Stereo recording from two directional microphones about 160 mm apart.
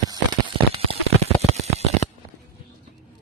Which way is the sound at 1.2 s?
40° right (ahead or behind).